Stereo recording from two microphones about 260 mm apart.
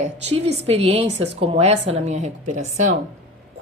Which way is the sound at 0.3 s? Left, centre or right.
Right.